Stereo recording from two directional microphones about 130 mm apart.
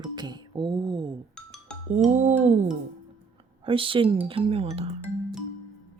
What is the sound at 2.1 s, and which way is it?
Music, 65° right (ahead or behind).